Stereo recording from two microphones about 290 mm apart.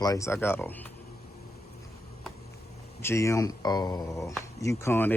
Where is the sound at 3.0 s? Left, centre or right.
Centre.